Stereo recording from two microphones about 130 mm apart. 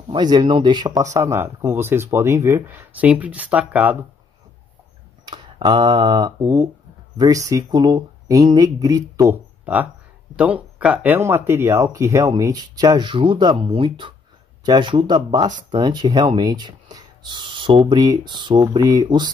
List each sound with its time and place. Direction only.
0.1 s speech: 35° right (ahead or behind)
1.1 s speech: 20° right (ahead or behind)
5.2 s speech: 35° right (ahead or behind)
9.7 s speech: 10° right (ahead or behind); by 19.3 s 35° right (ahead or behind)